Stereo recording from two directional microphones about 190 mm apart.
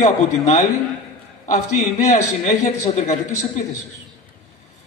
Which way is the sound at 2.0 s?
35° left (ahead or behind).